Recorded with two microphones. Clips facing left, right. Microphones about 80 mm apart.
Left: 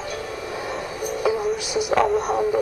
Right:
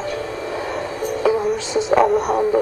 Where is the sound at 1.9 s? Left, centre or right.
Centre.